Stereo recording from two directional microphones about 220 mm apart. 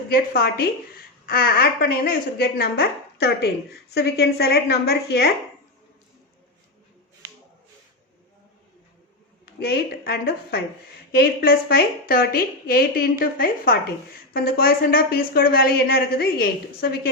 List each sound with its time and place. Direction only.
0.1 s a woman's voice: 45° left (ahead or behind)
9.5 s a woman's voice: 45° left (ahead or behind)